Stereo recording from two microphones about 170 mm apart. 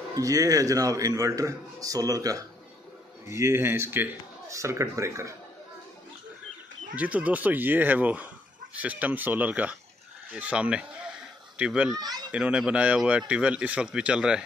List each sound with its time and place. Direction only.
0.1 s a man's voice: 20° right (ahead or behind)
7.0 s a man's voice: 10° right (ahead or behind)